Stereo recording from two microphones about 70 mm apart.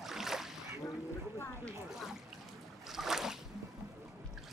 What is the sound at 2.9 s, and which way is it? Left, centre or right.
Boat, centre.